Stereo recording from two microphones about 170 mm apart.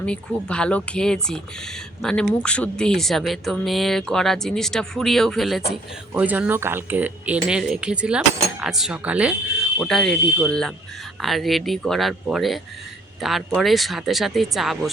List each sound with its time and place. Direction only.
0.0 s speech: 5° left (ahead or behind)